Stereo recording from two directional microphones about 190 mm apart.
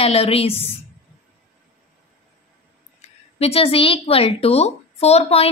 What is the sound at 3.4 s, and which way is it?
A woman's voice, 30° left (ahead or behind).